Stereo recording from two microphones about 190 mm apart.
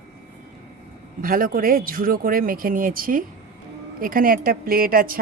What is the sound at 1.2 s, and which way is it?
A woman's voice, 50° right (ahead or behind).